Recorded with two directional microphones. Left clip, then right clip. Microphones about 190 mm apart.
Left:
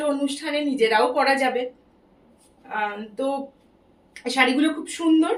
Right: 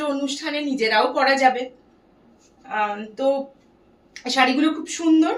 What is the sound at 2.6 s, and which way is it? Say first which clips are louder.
A woman's voice: right 3 dB; 15° right (ahead or behind).